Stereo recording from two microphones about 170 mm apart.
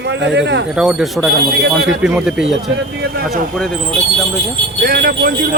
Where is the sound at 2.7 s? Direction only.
70° right (ahead or behind).